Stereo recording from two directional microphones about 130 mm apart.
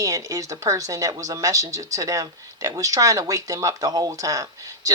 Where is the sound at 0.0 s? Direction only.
25° right (ahead or behind).